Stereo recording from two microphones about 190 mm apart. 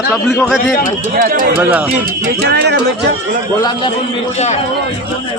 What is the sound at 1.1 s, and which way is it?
Speech, 50° right (ahead or behind).